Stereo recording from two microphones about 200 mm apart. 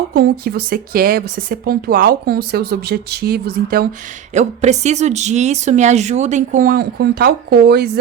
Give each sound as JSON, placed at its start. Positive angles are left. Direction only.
{"t": 0.1, "sound": "speech", "side_deg": -50}
{"t": 4.4, "sound": "speech", "side_deg": -35}